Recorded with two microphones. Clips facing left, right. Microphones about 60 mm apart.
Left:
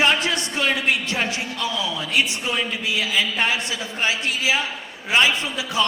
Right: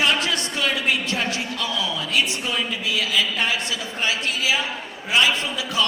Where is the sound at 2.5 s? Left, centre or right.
Centre.